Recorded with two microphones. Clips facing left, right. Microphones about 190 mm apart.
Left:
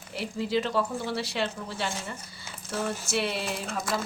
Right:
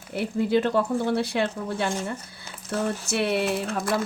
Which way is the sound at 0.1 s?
55° right (ahead or behind).